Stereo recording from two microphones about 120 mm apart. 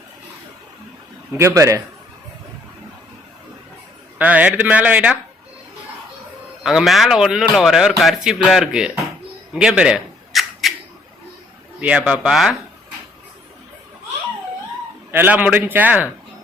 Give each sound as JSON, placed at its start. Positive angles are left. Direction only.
{"t": 1.3, "sound": "a man's voice", "side_deg": -20}
{"t": 4.2, "sound": "a man's voice", "side_deg": -10}
{"t": 6.6, "sound": "a man's voice", "side_deg": -5}
{"t": 9.6, "sound": "camera", "side_deg": -10}
{"t": 11.8, "sound": "a man's voice", "side_deg": -10}
{"t": 15.1, "sound": "a man's voice", "side_deg": -15}